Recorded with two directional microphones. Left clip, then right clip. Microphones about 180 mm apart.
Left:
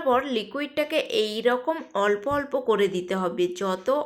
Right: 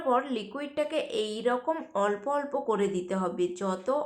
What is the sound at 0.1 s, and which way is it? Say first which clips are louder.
Speech: left 4 dB; 25° left (ahead or behind).